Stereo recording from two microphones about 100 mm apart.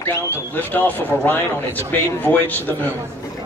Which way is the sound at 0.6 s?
15° left (ahead or behind).